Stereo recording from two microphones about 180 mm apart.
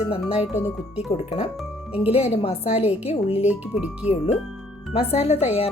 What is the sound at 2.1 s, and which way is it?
Speech, 35° left (ahead or behind).